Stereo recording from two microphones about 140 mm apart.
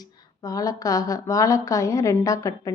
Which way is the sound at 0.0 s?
25° left (ahead or behind).